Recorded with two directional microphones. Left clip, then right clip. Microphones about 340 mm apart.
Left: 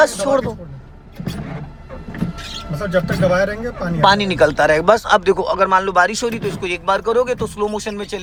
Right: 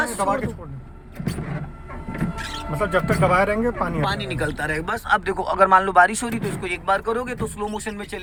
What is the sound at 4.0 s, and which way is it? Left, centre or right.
A man's voice, centre.